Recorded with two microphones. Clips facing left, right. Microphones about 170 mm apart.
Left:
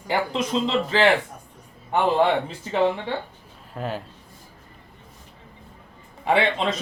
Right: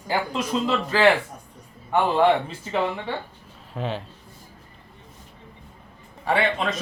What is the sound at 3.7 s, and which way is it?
Speech, 5° left (ahead or behind).